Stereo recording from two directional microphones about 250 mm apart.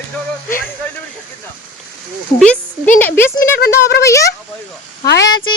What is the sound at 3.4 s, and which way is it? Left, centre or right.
Speech, left.